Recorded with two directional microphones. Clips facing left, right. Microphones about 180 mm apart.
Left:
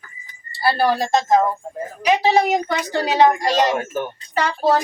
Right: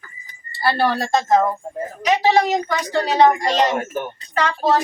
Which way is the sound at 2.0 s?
10° left (ahead or behind).